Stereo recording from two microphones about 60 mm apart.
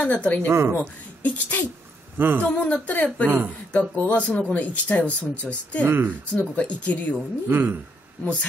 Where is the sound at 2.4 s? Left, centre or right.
Left.